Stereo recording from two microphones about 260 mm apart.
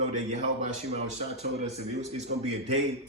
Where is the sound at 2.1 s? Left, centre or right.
Right.